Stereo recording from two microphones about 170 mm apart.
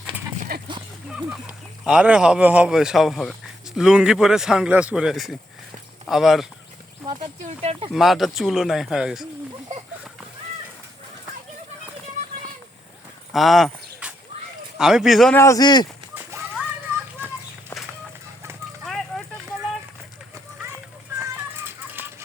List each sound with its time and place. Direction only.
0.5 s a sound: 65° right (ahead or behind)
1.1 s speech: 5° right (ahead or behind)
7.6 s speech: 35° right (ahead or behind)
7.9 s speech: centre (ahead or behind)
13.3 s speech: centre (ahead or behind)
14.0 s a sound: 5° right (ahead or behind)
14.8 s speech: 5° right (ahead or behind)
15.4 s speech: 20° left (ahead or behind)
16.1 s children playing: 15° right (ahead or behind)
18.9 s fire: centre (ahead or behind)
20.6 s a sound: 15° right (ahead or behind)
21.5 s music: 10° right (ahead or behind)